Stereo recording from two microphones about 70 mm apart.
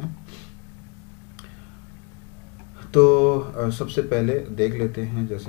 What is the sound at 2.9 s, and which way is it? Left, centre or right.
Speech, centre.